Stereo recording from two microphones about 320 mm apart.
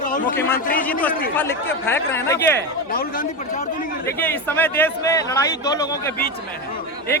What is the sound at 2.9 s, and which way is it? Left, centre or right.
Speech, left.